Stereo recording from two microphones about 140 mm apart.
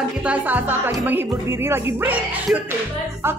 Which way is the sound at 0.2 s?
10° right (ahead or behind).